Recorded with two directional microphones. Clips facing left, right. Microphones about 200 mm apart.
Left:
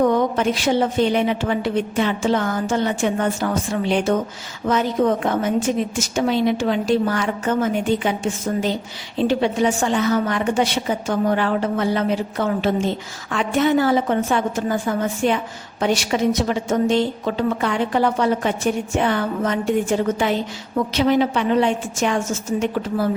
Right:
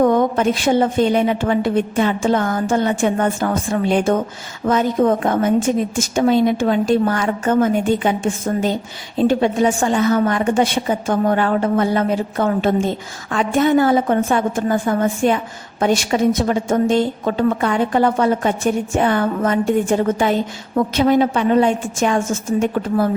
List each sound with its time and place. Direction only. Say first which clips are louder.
0.0 s a woman's voice: right 3 dB; 50° right (ahead or behind)